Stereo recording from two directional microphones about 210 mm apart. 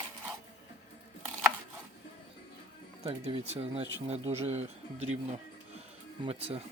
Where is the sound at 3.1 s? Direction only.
30° right (ahead or behind).